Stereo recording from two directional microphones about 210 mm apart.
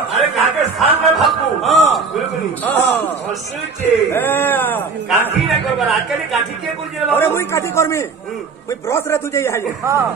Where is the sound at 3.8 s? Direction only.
10° left (ahead or behind).